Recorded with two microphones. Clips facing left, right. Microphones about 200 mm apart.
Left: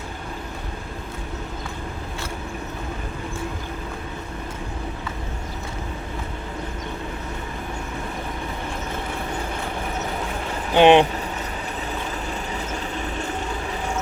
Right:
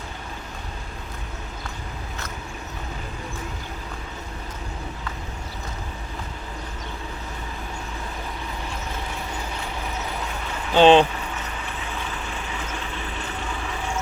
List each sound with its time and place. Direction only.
10.8 s speech: 15° left (ahead or behind)